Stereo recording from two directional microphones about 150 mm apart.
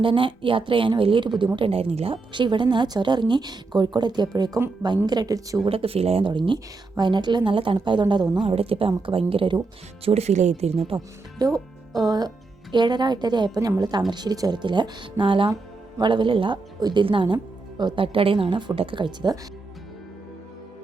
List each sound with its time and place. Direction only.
0.0 s a woman's voice: 35° right (ahead or behind)
5.6 s a woman's voice: 40° right (ahead or behind)
8.4 s a woman's voice: 40° right (ahead or behind)
11.3 s a woman's voice: 25° right (ahead or behind)